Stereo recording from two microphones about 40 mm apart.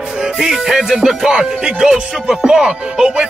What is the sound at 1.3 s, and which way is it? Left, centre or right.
Music, right.